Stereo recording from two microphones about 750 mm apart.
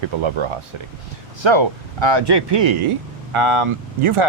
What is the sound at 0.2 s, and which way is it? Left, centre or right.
Speech, right.